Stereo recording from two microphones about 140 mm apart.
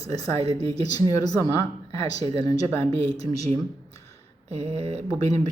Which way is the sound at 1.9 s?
45° right (ahead or behind).